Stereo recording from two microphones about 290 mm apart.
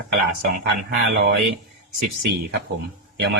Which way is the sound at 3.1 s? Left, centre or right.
Right.